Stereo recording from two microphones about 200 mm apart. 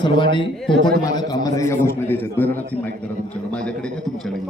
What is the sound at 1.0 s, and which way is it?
A man's voice, 20° left (ahead or behind).